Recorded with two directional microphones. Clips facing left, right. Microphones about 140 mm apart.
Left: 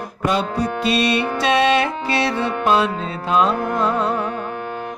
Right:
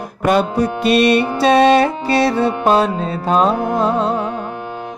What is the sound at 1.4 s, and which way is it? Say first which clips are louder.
Music: right 6 dB; 40° right (ahead or behind).